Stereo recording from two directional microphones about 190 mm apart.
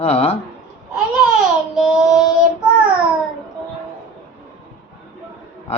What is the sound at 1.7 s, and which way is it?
Child singing, centre (ahead or behind).